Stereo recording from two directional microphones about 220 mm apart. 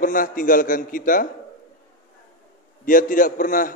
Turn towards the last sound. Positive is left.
turn(degrees=35)  # may be behind; listen again after turning